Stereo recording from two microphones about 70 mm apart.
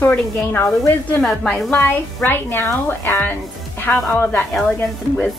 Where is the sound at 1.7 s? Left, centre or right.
Left.